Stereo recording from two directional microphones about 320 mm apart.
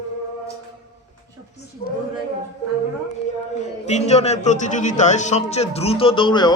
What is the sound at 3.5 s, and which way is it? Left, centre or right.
Speech, left.